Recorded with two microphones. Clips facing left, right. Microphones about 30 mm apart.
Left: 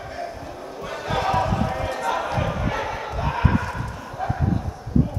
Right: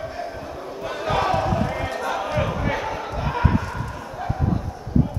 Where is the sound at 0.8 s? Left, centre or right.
Centre.